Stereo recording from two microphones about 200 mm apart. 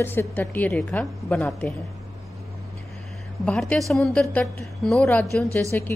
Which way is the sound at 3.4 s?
5° left (ahead or behind).